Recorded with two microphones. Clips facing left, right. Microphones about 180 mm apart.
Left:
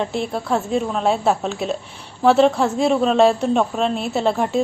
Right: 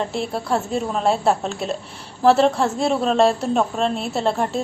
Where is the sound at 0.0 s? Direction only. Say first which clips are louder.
Left 1 dB; centre (ahead or behind).